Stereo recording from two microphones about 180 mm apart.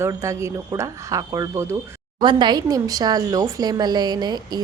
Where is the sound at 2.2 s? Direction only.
25° right (ahead or behind).